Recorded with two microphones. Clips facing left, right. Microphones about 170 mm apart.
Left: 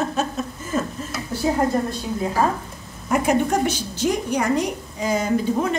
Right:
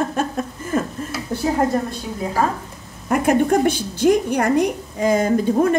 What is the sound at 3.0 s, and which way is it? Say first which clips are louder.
A woman's voice: right 3 dB; 55° right (ahead or behind).